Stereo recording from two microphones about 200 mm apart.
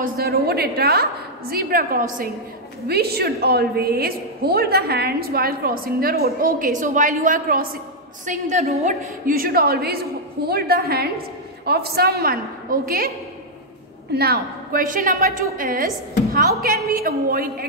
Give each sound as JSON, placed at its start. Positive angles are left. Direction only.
{"t": 0.0, "sound": "a woman's voice", "side_deg": -50}
{"t": 2.9, "sound": "a woman's voice", "side_deg": -50}
{"t": 9.3, "sound": "a woman's voice", "side_deg": -45}
{"t": 14.1, "sound": "a woman's voice", "side_deg": -50}